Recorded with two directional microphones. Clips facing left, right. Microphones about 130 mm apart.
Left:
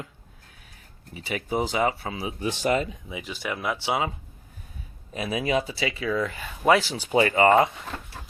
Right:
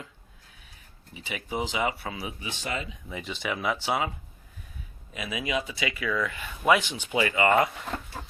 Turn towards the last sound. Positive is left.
turn(degrees=30)  # may be behind; listen again after turning